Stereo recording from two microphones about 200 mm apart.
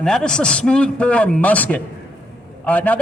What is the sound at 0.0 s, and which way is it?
A man's voice, 5° left (ahead or behind).